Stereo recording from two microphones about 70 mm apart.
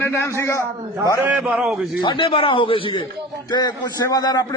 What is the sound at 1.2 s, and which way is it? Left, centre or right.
Speech, centre.